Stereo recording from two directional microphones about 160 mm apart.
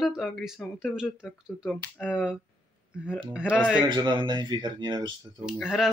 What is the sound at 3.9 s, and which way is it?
Speech, 30° right (ahead or behind).